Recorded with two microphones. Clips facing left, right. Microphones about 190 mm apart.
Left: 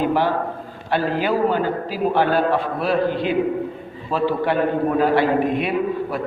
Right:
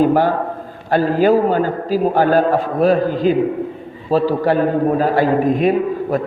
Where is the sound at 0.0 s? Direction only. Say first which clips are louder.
Right 5 dB; 45° right (ahead or behind).